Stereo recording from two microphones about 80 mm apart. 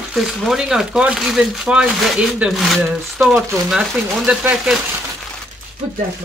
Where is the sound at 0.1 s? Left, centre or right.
Centre.